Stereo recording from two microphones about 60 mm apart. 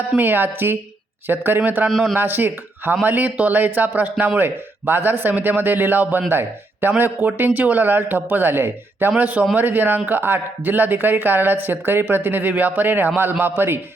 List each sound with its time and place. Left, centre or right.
0.2 s speech: right
1.9 s a man's voice: centre
2.1 s speech: right